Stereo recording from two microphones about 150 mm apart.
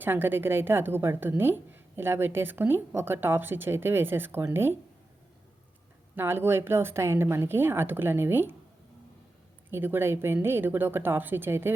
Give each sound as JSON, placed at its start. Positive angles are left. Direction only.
{"t": 0.0, "sound": "a woman's voice", "side_deg": -15}
{"t": 6.1, "sound": "a woman's voice", "side_deg": -15}
{"t": 9.6, "sound": "a woman's voice", "side_deg": -15}